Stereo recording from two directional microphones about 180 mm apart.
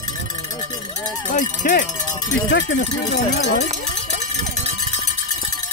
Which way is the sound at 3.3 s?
70° left (ahead or behind).